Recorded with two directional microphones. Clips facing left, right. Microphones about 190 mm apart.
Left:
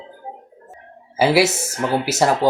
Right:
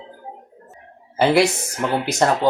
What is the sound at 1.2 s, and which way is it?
Speech, 5° left (ahead or behind).